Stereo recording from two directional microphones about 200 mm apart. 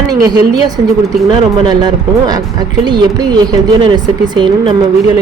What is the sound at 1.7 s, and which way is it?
Speech, 20° right (ahead or behind).